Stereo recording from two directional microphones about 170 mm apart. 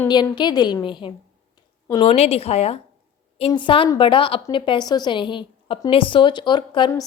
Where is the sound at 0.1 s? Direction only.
25° left (ahead or behind).